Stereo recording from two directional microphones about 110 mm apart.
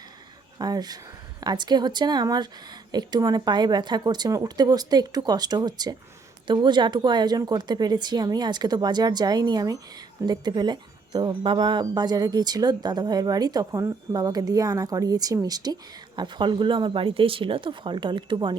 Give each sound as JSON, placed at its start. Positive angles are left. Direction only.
{"t": 0.6, "sound": "speech", "side_deg": -35}